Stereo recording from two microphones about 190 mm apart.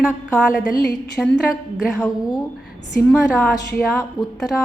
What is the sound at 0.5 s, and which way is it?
Speech, 50° left (ahead or behind).